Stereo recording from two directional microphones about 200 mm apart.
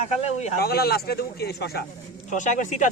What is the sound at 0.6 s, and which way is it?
Speech, 50° left (ahead or behind).